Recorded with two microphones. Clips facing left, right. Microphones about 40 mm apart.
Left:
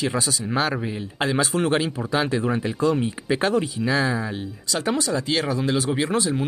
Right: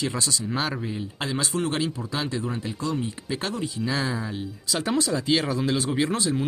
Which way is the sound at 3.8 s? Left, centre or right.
Centre.